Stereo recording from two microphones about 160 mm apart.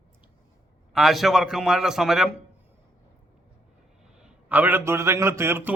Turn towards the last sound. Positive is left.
turn(degrees=-15)  # may be behind; listen again after turning